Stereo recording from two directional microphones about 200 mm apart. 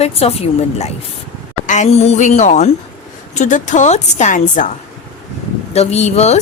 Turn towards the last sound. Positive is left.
turn(degrees=35)  # may be behind; listen again after turning